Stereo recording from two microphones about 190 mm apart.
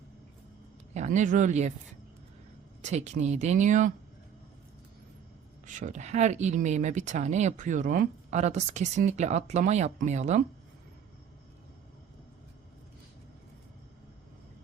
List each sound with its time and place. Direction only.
0.9 s speech: 40° right (ahead or behind)
2.8 s speech: 35° right (ahead or behind)
5.6 s speech: 40° right (ahead or behind)